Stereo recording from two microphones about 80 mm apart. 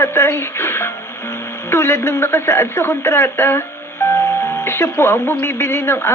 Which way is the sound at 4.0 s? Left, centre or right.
Left.